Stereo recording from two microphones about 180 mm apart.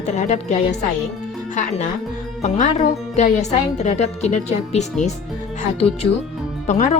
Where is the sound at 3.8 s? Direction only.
40° left (ahead or behind).